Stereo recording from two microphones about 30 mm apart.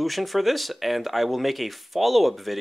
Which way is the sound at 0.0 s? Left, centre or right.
Centre.